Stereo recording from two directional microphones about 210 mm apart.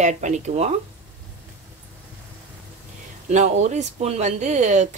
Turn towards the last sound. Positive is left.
turn(degrees=-35)  # may be behind; listen again after turning